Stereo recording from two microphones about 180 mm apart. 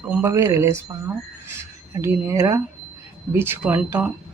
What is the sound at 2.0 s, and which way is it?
Speech, 15° right (ahead or behind).